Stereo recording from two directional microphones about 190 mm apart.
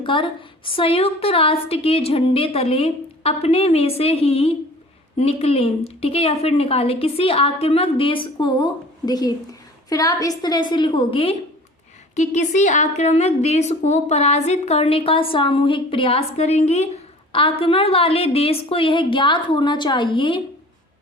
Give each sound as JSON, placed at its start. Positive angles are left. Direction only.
{"t": 0.0, "sound": "a woman's voice", "side_deg": 25}
{"t": 12.1, "sound": "a woman's voice", "side_deg": 40}